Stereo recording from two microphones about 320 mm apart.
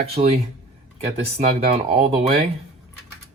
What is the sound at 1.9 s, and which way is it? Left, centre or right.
Speech, right.